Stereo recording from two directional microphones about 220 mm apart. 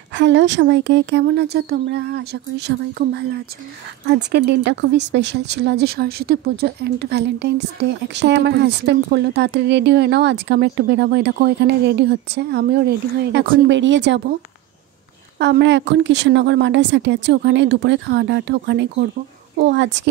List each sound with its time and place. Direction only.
0.1 s speech: 55° right (ahead or behind)
4.3 s speech: 50° right (ahead or behind)
15.3 s speech: 50° right (ahead or behind)